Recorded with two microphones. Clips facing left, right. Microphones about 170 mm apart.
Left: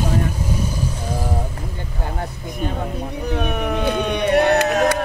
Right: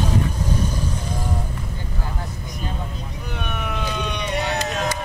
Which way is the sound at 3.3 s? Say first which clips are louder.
Left 7 dB; 45° left (ahead or behind).